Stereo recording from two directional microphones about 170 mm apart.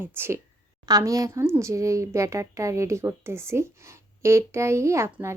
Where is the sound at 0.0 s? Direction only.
15° right (ahead or behind).